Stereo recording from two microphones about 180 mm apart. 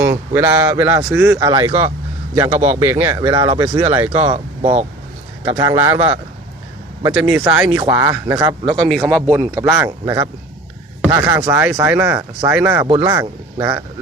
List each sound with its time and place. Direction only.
0.0 s speech: 15° right (ahead or behind)
1.5 s a man's voice: 25° right (ahead or behind)
2.8 s speech: 20° right (ahead or behind)
5.7 s speech: 15° right (ahead or behind)
7.1 s speech: 5° right (ahead or behind)
12.9 s speech: 25° right (ahead or behind)